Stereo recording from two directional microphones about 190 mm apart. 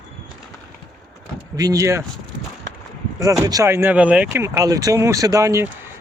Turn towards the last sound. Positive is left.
turn(degrees=-15)  # may be behind; listen again after turning